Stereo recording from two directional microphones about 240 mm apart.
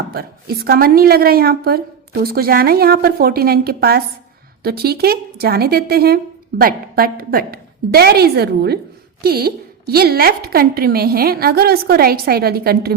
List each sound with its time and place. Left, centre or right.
0.1 s a woman's voice: right